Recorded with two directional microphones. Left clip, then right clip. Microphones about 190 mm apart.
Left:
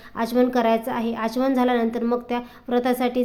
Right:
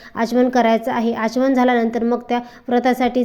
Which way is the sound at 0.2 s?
20° right (ahead or behind).